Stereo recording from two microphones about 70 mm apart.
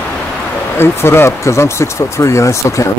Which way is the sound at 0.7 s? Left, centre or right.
Left.